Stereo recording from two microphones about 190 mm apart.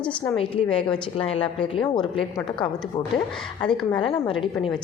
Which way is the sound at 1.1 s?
30° left (ahead or behind).